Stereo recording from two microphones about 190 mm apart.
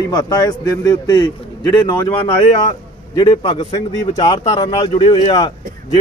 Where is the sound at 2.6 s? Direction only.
20° left (ahead or behind).